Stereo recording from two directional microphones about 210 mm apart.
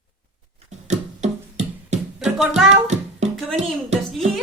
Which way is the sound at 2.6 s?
35° right (ahead or behind).